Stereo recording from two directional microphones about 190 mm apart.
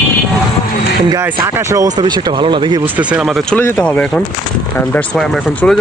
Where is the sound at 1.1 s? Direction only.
15° right (ahead or behind).